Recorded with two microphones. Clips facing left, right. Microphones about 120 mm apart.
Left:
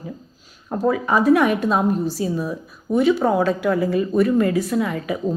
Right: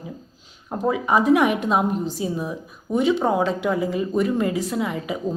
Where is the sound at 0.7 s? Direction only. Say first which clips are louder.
Left 1 dB; 15° right (ahead or behind).